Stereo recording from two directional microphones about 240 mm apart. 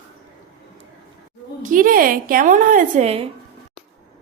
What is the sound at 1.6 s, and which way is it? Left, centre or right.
A woman's voice, right.